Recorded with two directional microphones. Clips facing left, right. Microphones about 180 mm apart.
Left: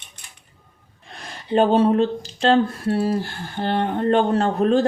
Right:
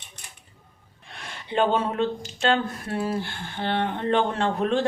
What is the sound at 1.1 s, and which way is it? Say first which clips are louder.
Speech: left 6 dB; 40° left (ahead or behind).